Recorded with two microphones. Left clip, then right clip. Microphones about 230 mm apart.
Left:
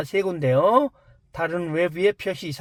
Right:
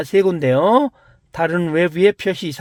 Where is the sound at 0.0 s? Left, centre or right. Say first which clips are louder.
Right 7 dB; right.